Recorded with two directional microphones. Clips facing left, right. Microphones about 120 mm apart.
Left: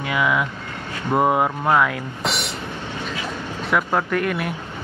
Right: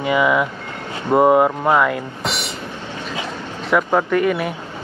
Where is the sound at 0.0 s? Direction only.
Centre (ahead or behind).